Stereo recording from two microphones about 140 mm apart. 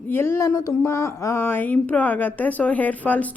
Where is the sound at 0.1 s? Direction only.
15° left (ahead or behind).